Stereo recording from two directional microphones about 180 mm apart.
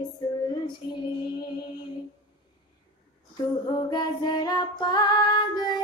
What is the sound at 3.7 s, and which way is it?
Music, 20° left (ahead or behind).